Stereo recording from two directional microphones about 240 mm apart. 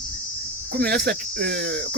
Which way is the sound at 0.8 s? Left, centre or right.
Right.